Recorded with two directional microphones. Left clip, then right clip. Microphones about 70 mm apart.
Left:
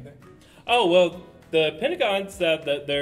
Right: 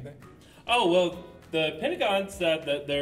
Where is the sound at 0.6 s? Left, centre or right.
Left.